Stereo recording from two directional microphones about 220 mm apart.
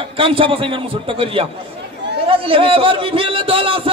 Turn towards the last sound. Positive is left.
turn(degrees=-25)  # may be behind; listen again after turning